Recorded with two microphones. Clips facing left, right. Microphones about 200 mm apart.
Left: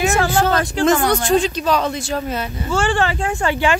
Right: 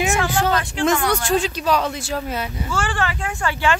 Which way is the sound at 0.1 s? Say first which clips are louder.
Left 3 dB; 35° left (ahead or behind).